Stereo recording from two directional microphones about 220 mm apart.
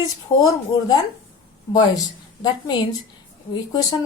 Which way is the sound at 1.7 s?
20° left (ahead or behind).